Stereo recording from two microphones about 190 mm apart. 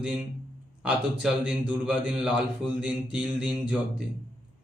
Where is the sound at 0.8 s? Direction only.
5° right (ahead or behind).